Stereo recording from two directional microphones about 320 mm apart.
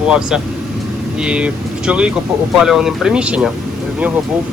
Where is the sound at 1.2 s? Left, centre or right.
Centre.